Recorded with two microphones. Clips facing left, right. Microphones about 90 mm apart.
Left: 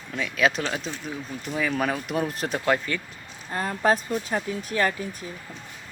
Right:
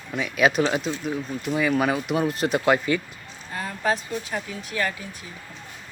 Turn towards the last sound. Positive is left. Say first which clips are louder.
# left 3 dB
turn(degrees=40)  # may be behind; listen again after turning